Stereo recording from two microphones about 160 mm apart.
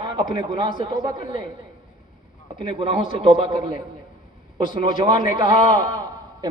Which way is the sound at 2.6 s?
30° right (ahead or behind).